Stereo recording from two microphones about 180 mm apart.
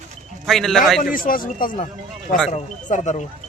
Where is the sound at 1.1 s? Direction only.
50° left (ahead or behind).